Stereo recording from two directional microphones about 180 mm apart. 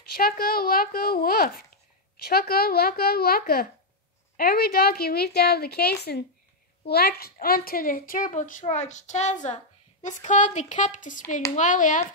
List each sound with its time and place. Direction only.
0.1 s a woman's voice: 55° left (ahead or behind)